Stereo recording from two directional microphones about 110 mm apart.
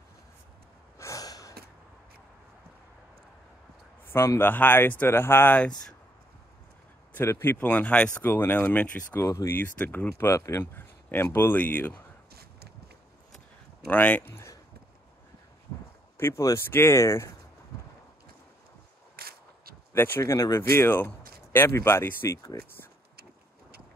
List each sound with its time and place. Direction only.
0.9 s gasp: 30° left (ahead or behind)
4.1 s speech: 25° left (ahead or behind)
7.2 s speech: 20° left (ahead or behind)
13.8 s speech: 15° left (ahead or behind)
16.2 s speech: 25° left (ahead or behind)
19.9 s speech: 25° left (ahead or behind)